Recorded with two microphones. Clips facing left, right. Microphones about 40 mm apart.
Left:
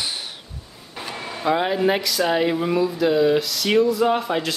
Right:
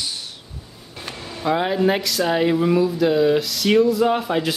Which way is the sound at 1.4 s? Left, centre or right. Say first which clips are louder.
Right 1 dB; centre.